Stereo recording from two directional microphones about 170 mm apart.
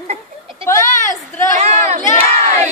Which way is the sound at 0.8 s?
50° left (ahead or behind).